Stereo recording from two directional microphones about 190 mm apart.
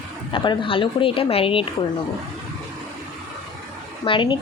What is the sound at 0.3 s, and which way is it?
Speech, 25° left (ahead or behind).